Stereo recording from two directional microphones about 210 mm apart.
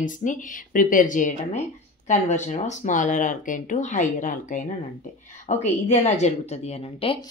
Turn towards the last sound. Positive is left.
turn(degrees=25)  # may be behind; listen again after turning